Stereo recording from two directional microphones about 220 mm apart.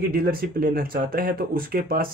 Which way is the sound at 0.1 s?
40° right (ahead or behind).